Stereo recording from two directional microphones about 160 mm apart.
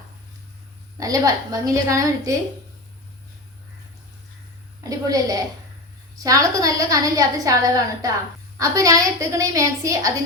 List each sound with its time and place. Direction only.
0.9 s a woman's voice: 20° right (ahead or behind)
4.8 s a woman's voice: 20° right (ahead or behind)